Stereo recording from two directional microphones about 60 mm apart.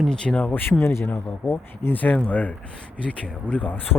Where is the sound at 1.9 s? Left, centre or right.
Left.